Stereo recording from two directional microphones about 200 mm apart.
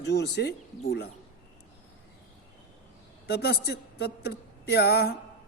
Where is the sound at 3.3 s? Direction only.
55° left (ahead or behind).